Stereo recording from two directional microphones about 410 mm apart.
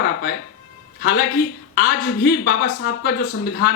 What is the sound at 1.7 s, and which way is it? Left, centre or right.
A woman's voice, left.